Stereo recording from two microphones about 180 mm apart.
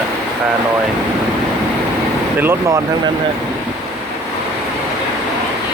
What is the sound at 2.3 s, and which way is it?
Speech, 10° right (ahead or behind).